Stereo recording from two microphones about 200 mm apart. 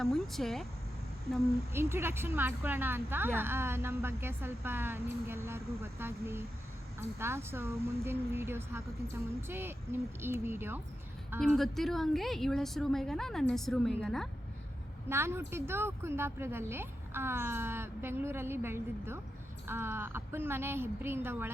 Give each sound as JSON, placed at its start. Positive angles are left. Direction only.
{"t": 0.0, "sound": "a woman's voice", "side_deg": 0}
{"t": 1.7, "sound": "a woman's voice", "side_deg": -10}
{"t": 11.3, "sound": "a woman's voice", "side_deg": 0}
{"t": 15.1, "sound": "a woman's voice", "side_deg": -10}